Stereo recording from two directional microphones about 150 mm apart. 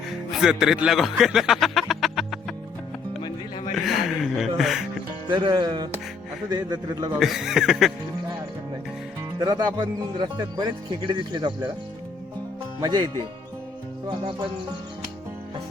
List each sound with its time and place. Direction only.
0.1 s speech: 5° right (ahead or behind)
3.8 s speech: centre (ahead or behind)
5.4 s a man's voice: 30° right (ahead or behind)
7.2 s speech: centre (ahead or behind)
9.4 s speech: 30° right (ahead or behind)
12.8 s a man's voice: 30° right (ahead or behind)